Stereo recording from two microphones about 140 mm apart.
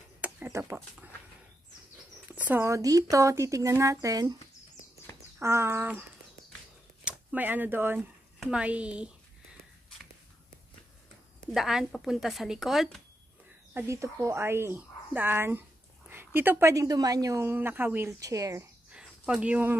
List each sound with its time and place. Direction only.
0.2 s a sound: 15° right (ahead or behind)
2.3 s a woman's voice: 15° right (ahead or behind)
5.4 s speech: 20° right (ahead or behind)
7.1 s speech: 10° right (ahead or behind)
11.5 s a woman's voice: centre (ahead or behind)
13.7 s a woman's voice: 20° right (ahead or behind)
18.9 s a sound: 5° right (ahead or behind)